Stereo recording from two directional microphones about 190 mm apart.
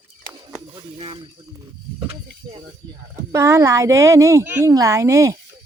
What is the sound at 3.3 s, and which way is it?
A woman's voice, 15° right (ahead or behind).